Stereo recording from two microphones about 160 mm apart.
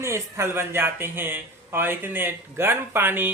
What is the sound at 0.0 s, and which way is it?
Speech, 15° right (ahead or behind).